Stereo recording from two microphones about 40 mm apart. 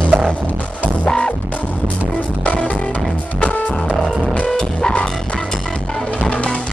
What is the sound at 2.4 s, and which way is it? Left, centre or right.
Music, left.